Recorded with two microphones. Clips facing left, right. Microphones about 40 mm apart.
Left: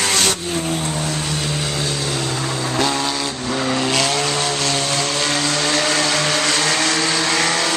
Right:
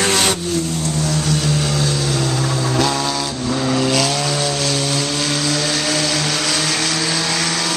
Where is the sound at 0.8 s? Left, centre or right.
Centre.